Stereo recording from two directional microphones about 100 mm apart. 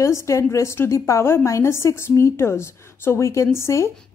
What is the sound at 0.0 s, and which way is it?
A woman's voice, 30° left (ahead or behind).